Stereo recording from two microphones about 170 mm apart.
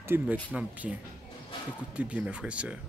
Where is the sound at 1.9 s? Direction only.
5° right (ahead or behind).